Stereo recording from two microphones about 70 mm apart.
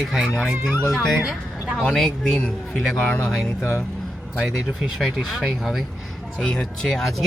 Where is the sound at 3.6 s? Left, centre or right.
Left.